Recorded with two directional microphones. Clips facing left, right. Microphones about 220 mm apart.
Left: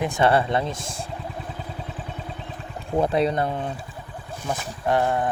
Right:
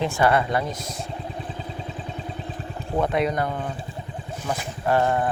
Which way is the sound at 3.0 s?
30° left (ahead or behind).